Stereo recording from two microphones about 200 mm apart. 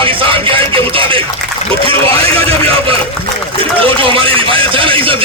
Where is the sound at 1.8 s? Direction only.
30° right (ahead or behind).